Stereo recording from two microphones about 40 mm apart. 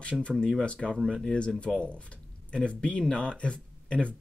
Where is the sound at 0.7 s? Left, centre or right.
Left.